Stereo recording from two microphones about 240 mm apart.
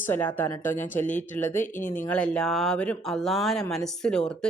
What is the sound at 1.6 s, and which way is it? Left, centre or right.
Speech, left.